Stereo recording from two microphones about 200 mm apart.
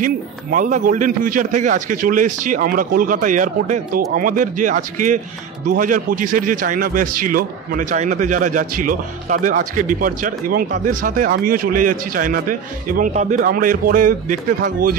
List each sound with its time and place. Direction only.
0.0 s a man's voice: 40° right (ahead or behind)